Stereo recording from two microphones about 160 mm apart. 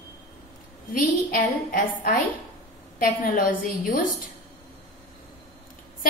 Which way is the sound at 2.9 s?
60° left (ahead or behind).